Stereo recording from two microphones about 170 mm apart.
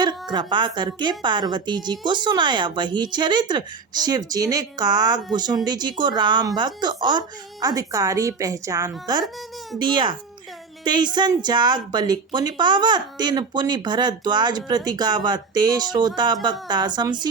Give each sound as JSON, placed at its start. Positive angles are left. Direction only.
{"t": 0.0, "sound": "a woman's voice", "side_deg": -25}